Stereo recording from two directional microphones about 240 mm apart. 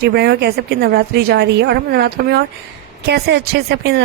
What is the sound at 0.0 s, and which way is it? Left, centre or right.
A woman's voice, right.